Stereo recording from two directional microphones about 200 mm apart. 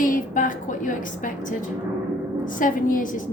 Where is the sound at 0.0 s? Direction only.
40° left (ahead or behind).